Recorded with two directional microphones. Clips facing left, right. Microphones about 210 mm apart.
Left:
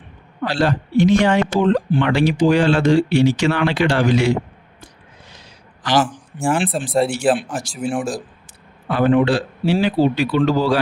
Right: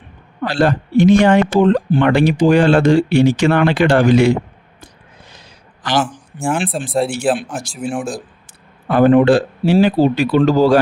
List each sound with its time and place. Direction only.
0.4 s speech: 55° right (ahead or behind)
6.0 s speech: centre (ahead or behind)
8.9 s speech: 50° right (ahead or behind)